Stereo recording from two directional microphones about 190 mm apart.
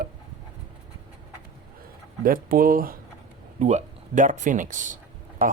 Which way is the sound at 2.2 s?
50° right (ahead or behind).